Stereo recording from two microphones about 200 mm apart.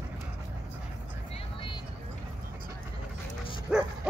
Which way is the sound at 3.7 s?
5° right (ahead or behind).